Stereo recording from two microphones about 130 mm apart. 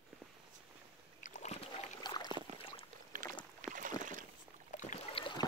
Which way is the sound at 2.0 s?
35° left (ahead or behind).